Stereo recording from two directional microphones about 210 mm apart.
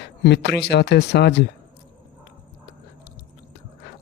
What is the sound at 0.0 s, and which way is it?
Speech, 55° left (ahead or behind).